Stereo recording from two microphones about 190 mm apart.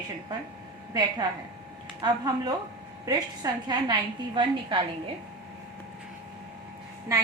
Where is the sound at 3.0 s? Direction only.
20° right (ahead or behind).